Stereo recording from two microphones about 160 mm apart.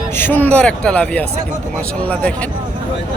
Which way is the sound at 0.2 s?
10° left (ahead or behind).